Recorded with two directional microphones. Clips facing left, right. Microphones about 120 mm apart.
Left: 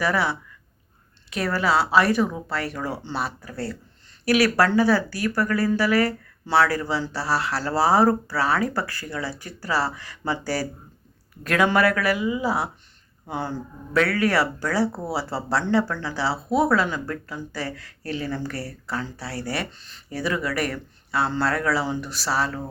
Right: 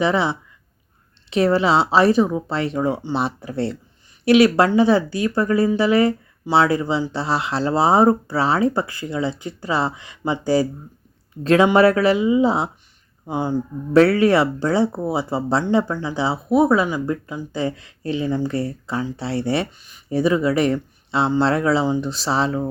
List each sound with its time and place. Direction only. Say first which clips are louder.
0.0 s speech: right 4 dB; 20° right (ahead or behind)
13.9 s speech: right 7 dB; 30° right (ahead or behind)
19.7 s speech: left 1 dB; 10° right (ahead or behind)
20.1 s speech: right 8 dB; 25° right (ahead or behind)